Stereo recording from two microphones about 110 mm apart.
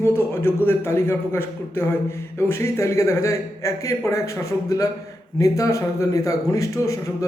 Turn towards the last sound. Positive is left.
turn(degrees=30)  # may be behind; listen again after turning